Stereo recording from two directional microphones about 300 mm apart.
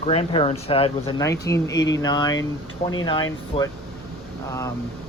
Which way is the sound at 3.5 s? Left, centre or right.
Centre.